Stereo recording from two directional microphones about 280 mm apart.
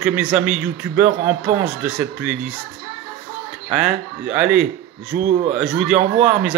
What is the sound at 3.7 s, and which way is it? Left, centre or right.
Speech, centre.